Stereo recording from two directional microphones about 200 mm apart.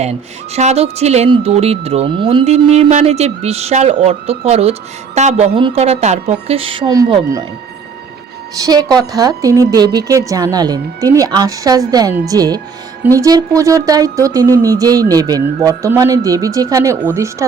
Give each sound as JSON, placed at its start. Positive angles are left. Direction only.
{"t": 0.0, "sound": "speech", "side_deg": -35}
{"t": 8.6, "sound": "a woman's voice", "side_deg": -20}